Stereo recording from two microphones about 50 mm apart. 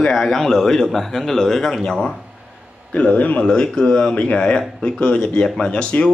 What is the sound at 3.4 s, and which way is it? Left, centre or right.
A man's voice, centre.